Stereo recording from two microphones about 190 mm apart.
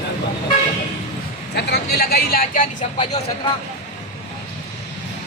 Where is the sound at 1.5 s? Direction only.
60° left (ahead or behind); by 3.2 s 40° left (ahead or behind).